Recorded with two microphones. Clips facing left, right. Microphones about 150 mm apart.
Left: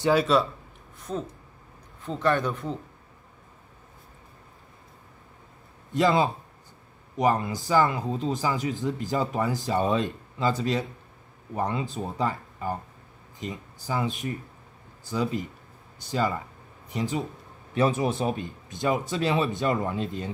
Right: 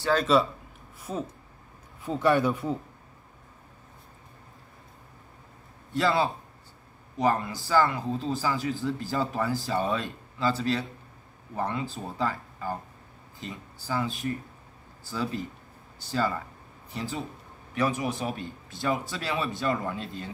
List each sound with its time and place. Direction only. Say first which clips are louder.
0.0 s speech: left 1 dB; 5° left (ahead or behind); by 2.8 s 10° right (ahead or behind)
5.9 s speech: left 3 dB; 20° left (ahead or behind)